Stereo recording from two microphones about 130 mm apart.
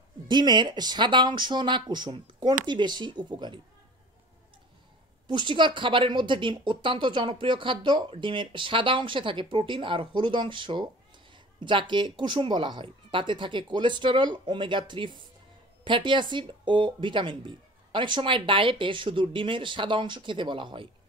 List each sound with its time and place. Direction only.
0.3 s a woman's voice: 35° right (ahead or behind)
5.3 s a woman's voice: 35° right (ahead or behind)